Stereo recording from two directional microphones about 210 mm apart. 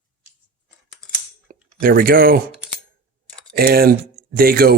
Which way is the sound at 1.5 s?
45° right (ahead or behind).